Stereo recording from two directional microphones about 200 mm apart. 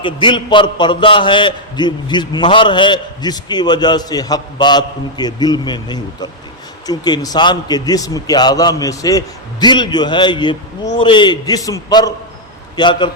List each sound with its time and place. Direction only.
0.0 s a man's voice: 25° left (ahead or behind)